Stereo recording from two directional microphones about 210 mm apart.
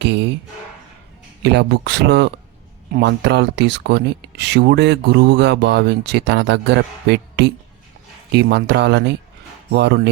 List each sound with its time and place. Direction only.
0.0 s speech: 55° right (ahead or behind)
1.4 s speech: 55° right (ahead or behind)